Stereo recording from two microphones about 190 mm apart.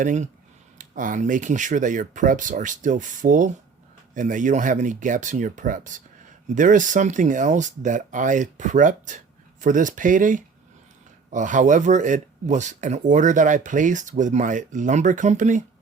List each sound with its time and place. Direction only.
0.0 s speech: 40° right (ahead or behind)